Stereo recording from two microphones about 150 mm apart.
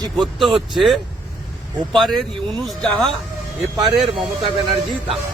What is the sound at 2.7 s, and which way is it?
Speech, 5° left (ahead or behind).